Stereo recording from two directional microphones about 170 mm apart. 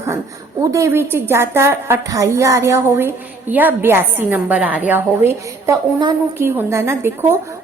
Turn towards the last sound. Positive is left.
turn(degrees=-15)  # may be behind; listen again after turning